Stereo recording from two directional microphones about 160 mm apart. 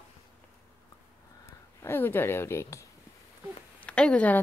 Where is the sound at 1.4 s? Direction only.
15° left (ahead or behind).